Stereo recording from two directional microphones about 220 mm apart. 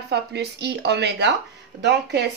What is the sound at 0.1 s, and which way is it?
Speech, 50° right (ahead or behind).